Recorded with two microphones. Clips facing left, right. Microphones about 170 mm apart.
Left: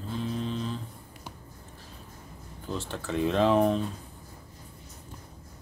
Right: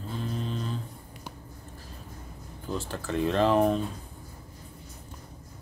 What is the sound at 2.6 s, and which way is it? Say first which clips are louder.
Speech: right 1 dB; centre (ahead or behind).